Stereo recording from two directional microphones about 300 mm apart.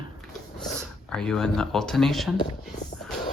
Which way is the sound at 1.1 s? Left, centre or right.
Centre.